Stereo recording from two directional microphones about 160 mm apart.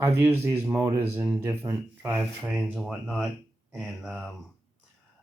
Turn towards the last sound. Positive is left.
turn(degrees=0)  # may be behind; listen again after turning